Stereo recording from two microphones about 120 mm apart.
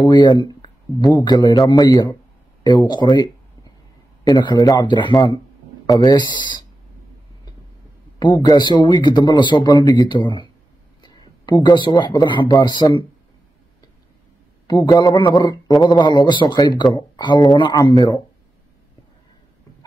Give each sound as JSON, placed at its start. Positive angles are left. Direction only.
{"t": 0.0, "sound": "speech", "side_deg": 40}
{"t": 8.2, "sound": "speech", "side_deg": 35}
{"t": 14.7, "sound": "speech", "side_deg": 40}